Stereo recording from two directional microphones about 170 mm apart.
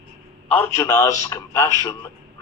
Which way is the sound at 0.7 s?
15° left (ahead or behind).